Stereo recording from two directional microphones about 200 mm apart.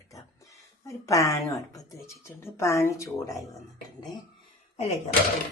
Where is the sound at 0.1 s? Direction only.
15° left (ahead or behind).